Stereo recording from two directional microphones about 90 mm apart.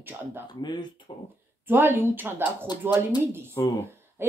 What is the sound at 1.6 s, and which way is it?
Speech, 25° right (ahead or behind).